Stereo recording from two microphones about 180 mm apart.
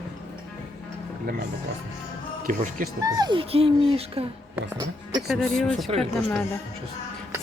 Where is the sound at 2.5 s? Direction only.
45° right (ahead or behind).